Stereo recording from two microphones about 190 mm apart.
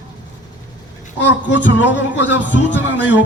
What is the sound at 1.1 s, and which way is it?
A man's voice, 70° left (ahead or behind).